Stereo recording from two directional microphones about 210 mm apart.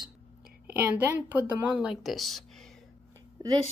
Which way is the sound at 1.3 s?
5° right (ahead or behind).